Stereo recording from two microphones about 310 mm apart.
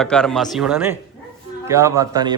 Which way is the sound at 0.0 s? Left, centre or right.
Centre.